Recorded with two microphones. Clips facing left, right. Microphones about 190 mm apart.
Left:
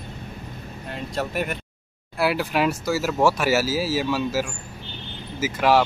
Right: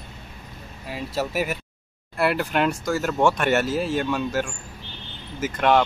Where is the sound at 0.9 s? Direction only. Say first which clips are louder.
Right 1 dB; 5° right (ahead or behind).